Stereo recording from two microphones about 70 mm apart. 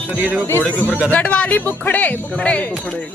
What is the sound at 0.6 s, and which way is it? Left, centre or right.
A man's voice, left.